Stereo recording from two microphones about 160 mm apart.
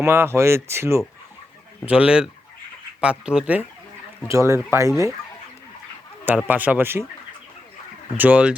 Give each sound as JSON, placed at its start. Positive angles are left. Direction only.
{"t": 0.0, "sound": "speech", "side_deg": -15}
{"t": 4.3, "sound": "speech", "side_deg": -15}
{"t": 6.2, "sound": "speech", "side_deg": -10}
{"t": 8.1, "sound": "speech", "side_deg": -10}